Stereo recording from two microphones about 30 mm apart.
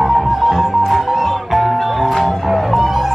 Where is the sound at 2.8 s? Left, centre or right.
Centre.